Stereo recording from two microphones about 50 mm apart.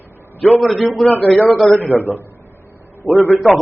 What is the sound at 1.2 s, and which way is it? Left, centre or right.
Speech, left.